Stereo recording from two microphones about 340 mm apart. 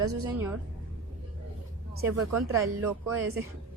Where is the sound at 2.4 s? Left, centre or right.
Centre.